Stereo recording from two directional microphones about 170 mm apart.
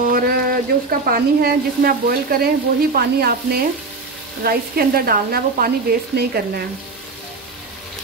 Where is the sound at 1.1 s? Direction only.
60° right (ahead or behind).